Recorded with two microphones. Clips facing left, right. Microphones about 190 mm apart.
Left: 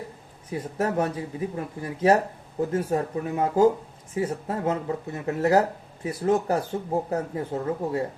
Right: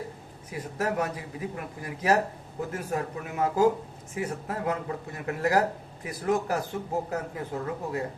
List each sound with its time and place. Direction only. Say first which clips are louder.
0.5 s speech: left 4 dB; 30° left (ahead or behind)